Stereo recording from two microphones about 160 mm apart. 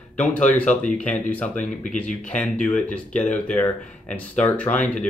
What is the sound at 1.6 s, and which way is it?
Speech, 50° left (ahead or behind).